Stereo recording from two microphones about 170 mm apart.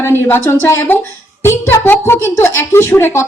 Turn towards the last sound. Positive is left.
turn(degrees=15)  # may be behind; listen again after turning